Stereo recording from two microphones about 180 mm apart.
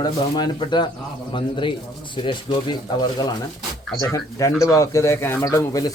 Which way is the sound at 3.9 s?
20° left (ahead or behind).